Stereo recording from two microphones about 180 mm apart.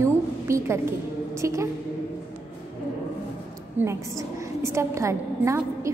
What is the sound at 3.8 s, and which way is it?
A woman's voice, 15° right (ahead or behind).